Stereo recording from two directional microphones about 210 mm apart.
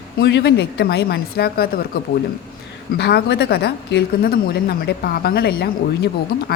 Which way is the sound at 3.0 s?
50° left (ahead or behind).